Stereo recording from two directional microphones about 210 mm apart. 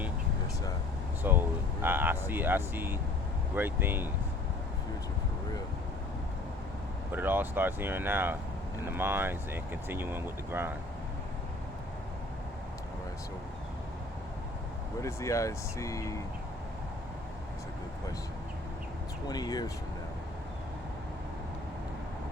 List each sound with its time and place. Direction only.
1.2 s a sound: 10° right (ahead or behind)
3.5 s speech: 10° right (ahead or behind)
7.1 s speech: 10° right (ahead or behind)
15.0 s speech: 15° left (ahead or behind)
19.3 s speech: 20° left (ahead or behind)